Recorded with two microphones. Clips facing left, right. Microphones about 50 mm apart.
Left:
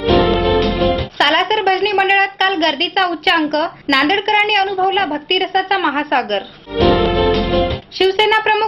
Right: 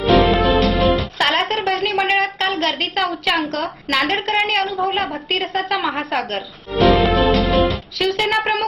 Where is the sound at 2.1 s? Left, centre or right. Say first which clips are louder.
Left 5 dB; left.